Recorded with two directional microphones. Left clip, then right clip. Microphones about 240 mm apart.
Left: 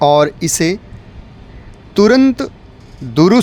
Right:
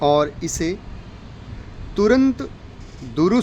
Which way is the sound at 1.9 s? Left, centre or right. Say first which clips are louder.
Left 6 dB; left.